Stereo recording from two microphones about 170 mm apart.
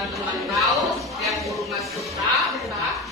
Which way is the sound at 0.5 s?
Centre (ahead or behind).